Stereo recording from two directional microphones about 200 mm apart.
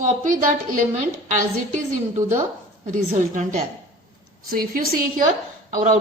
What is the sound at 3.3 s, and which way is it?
A woman's voice, 40° right (ahead or behind).